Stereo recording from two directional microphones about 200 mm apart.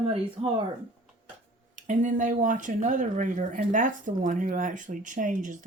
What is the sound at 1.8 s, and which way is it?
Speech, 40° right (ahead or behind).